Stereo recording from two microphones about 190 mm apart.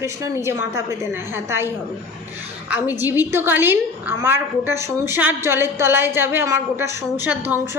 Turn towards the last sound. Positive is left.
turn(degrees=-10)  # may be behind; listen again after turning